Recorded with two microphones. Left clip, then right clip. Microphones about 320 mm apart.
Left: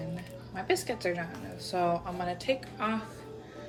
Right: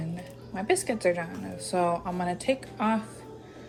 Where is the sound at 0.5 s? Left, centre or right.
Centre.